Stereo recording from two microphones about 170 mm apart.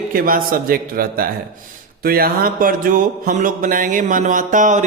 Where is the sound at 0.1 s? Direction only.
55° right (ahead or behind).